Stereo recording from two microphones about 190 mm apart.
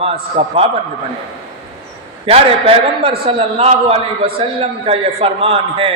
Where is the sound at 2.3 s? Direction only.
30° right (ahead or behind).